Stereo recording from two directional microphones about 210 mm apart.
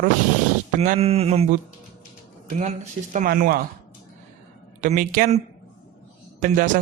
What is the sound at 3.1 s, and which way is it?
Speech, 40° right (ahead or behind).